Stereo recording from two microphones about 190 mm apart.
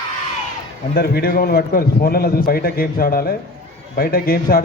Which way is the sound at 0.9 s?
55° left (ahead or behind).